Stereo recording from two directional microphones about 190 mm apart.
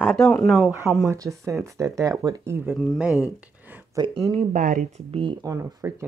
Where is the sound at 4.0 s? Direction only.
30° right (ahead or behind).